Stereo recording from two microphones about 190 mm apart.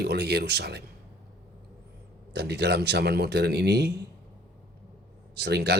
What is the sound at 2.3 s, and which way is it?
Speech, 60° right (ahead or behind).